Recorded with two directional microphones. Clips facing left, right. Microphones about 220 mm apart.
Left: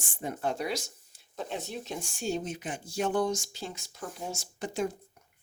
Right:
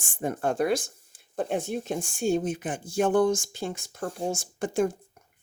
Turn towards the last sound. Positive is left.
turn(degrees=-50)  # may be behind; listen again after turning